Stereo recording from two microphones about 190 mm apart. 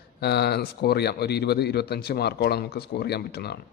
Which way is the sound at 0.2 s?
60° left (ahead or behind).